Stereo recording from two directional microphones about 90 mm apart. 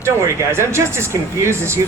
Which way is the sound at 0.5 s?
30° right (ahead or behind).